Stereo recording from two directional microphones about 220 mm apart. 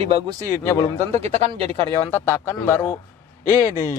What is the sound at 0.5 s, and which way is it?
Speech, 10° left (ahead or behind).